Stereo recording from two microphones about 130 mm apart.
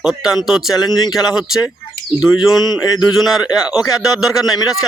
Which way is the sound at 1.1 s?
5° right (ahead or behind).